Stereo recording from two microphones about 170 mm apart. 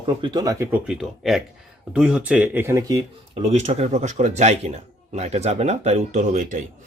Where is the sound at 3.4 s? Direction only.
35° right (ahead or behind).